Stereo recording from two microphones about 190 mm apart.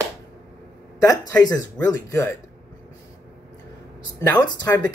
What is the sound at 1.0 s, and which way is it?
Speech, 15° left (ahead or behind).